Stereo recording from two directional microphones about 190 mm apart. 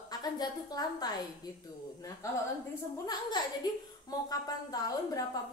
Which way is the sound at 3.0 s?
20° left (ahead or behind).